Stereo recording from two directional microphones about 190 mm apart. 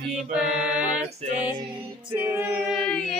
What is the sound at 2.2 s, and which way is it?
Speech, 15° right (ahead or behind).